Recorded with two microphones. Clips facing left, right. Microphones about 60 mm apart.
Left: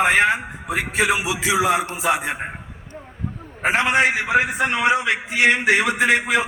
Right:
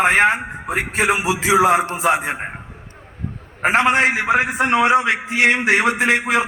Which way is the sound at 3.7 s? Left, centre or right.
Right.